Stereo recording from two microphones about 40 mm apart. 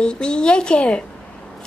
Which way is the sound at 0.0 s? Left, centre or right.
Left.